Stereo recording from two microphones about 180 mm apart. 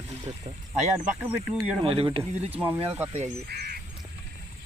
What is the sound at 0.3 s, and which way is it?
Speech, 35° right (ahead or behind).